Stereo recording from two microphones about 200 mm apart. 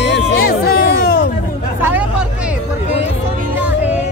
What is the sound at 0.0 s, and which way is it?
Music, 55° left (ahead or behind).